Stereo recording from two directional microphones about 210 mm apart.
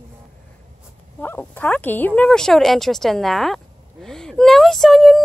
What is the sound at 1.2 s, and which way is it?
Speech, 10° left (ahead or behind).